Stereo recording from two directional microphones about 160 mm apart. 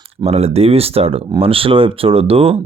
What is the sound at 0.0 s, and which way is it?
Speech, 40° right (ahead or behind).